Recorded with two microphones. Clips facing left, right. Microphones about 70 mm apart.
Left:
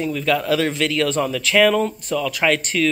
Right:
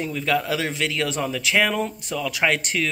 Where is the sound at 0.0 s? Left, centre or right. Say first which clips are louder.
Left 3 dB; right.